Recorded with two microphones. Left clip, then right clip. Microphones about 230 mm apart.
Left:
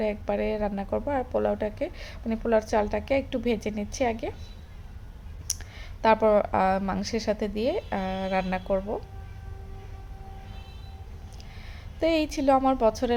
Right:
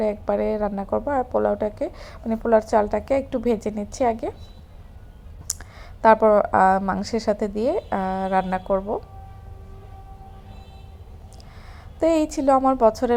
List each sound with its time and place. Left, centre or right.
0.0 s speech: centre
5.5 s speech: centre
11.9 s speech: centre